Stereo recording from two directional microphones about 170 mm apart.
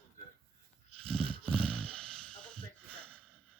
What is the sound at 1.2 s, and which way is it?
Dog, 35° right (ahead or behind).